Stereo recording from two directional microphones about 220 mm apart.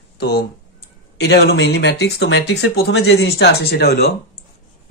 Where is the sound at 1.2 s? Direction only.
50° left (ahead or behind).